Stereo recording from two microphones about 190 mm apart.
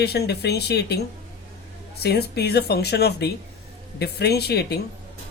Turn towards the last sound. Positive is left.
turn(degrees=60)  # may be behind; listen again after turning